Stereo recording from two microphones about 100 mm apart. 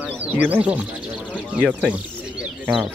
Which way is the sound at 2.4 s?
5° right (ahead or behind).